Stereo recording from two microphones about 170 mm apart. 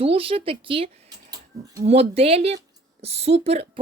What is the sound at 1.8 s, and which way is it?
Speech, 35° right (ahead or behind).